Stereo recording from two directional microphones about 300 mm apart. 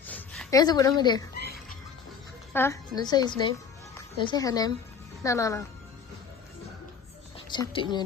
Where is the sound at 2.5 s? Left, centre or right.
Centre.